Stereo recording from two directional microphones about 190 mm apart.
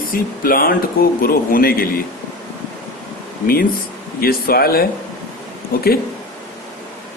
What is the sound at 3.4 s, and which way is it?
Speech, 50° left (ahead or behind).